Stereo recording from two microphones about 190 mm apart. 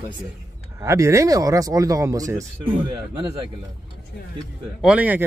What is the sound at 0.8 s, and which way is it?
Speech, 15° right (ahead or behind).